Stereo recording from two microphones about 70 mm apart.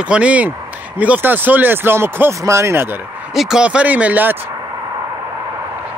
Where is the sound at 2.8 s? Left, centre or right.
Right.